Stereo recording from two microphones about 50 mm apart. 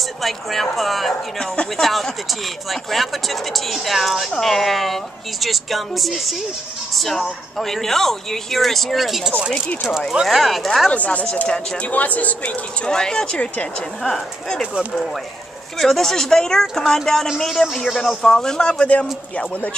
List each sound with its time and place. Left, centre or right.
0.2 s speech: centre
10.9 s speech: left
11.4 s speech: centre
11.9 s speech: left
12.8 s speech: centre
14.0 s speech: centre
15.8 s speech: centre
18.8 s speech: left